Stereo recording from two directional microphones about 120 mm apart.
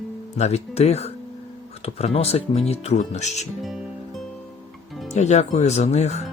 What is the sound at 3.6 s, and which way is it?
Music, centre (ahead or behind).